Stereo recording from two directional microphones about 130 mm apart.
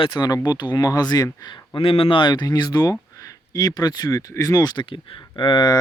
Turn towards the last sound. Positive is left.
turn(degrees=35)  # may be behind; listen again after turning